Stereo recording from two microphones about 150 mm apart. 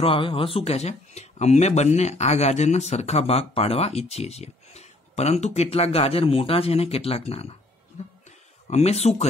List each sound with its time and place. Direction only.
0.0 s speech: 35° left (ahead or behind)
8.6 s speech: 45° left (ahead or behind)